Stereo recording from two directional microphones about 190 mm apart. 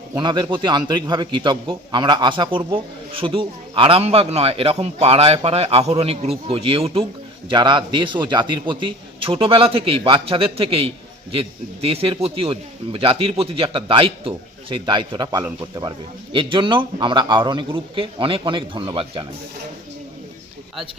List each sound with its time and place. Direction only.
0.1 s a man's voice: 20° right (ahead or behind)